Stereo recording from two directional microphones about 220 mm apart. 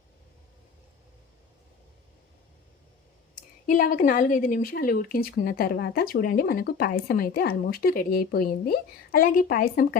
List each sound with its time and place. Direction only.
3.3 s speech: 35° left (ahead or behind)